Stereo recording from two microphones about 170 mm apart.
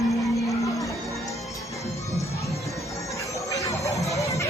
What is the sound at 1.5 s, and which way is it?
Music, 20° left (ahead or behind).